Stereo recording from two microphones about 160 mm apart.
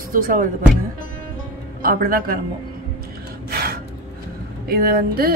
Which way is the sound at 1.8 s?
65° right (ahead or behind).